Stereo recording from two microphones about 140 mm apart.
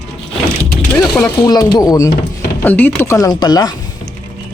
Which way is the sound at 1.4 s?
25° left (ahead or behind).